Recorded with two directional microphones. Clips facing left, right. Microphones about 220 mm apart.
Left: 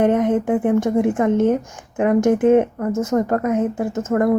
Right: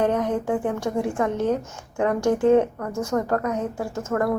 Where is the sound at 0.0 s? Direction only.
20° left (ahead or behind).